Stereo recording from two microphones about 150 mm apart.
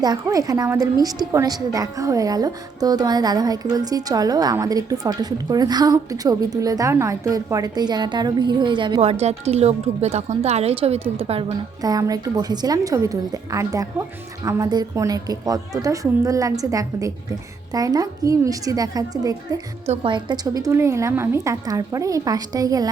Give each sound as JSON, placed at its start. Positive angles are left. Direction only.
{"t": 0.0, "sound": "a woman's voice", "side_deg": -25}
{"t": 11.8, "sound": "a woman's voice", "side_deg": -25}
{"t": 19.9, "sound": "a woman's voice", "side_deg": -35}